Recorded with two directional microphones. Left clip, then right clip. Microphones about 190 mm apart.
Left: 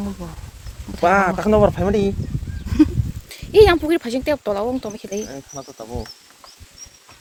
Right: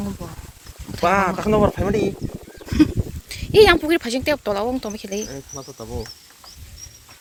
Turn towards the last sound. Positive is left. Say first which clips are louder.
# left 1 dB
turn(degrees=40)  # may be behind; listen again after turning